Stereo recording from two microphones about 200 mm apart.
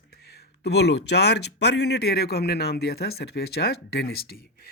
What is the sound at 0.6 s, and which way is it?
Speech, 55° left (ahead or behind).